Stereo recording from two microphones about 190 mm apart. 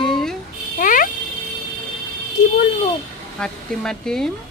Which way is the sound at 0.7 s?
45° left (ahead or behind).